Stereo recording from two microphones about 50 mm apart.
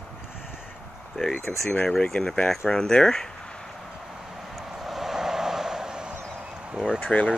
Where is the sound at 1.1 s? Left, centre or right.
Centre.